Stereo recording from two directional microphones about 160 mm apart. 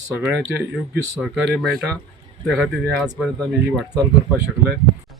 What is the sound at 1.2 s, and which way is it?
Speech, 5° left (ahead or behind).